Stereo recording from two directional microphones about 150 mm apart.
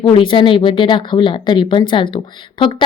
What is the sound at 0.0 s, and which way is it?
Speech, 35° left (ahead or behind).